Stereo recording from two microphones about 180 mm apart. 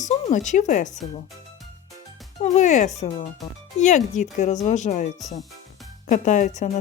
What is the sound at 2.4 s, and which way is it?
Speech, 40° left (ahead or behind).